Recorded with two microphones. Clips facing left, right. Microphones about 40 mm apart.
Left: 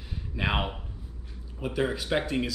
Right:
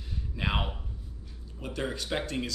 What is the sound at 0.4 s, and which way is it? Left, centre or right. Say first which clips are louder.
Speech: left 3 dB; centre.